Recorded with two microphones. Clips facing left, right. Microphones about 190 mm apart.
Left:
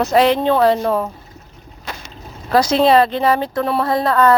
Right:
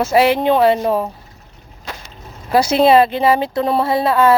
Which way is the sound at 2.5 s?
10° right (ahead or behind).